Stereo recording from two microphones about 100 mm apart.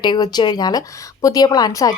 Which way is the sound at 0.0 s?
45° left (ahead or behind).